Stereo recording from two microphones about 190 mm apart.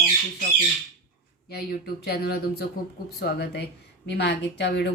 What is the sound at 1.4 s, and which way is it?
A woman's voice, 55° left (ahead or behind).